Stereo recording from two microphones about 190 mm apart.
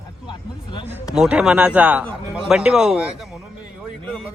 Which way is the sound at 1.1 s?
5° right (ahead or behind).